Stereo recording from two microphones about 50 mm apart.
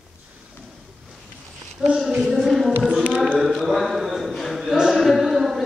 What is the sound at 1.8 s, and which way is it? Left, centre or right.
Speech, centre.